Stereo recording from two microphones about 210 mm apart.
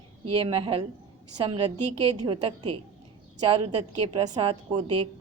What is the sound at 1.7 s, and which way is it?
Speech, 90° right.